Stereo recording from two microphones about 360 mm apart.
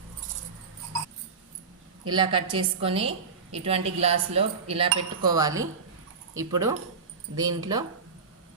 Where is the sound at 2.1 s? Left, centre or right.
Centre.